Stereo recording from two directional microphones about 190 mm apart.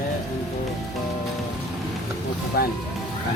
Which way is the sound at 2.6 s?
55° left (ahead or behind).